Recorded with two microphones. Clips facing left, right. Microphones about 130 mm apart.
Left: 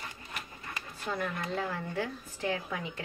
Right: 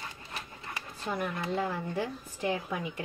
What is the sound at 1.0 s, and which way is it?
Speech, 15° right (ahead or behind).